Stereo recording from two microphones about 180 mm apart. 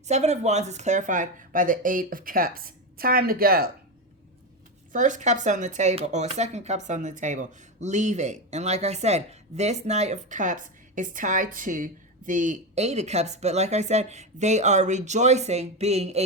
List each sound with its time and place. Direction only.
0.1 s a woman's voice: 40° right (ahead or behind); by 3.7 s 55° right (ahead or behind)
4.9 s speech: 45° right (ahead or behind)